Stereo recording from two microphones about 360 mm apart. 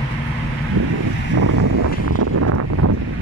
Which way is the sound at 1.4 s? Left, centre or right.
Right.